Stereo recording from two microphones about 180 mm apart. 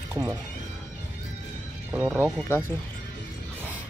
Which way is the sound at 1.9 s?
10° right (ahead or behind).